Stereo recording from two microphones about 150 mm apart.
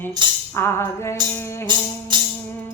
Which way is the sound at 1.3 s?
15° left (ahead or behind).